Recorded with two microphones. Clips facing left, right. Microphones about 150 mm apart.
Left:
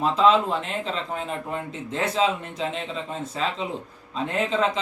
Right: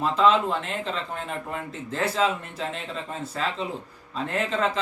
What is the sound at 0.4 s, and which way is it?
Speech, centre (ahead or behind).